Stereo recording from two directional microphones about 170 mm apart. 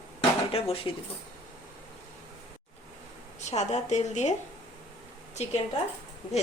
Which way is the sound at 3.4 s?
40° left (ahead or behind).